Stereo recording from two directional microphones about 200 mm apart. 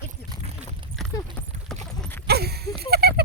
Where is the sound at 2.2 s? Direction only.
55° right (ahead or behind).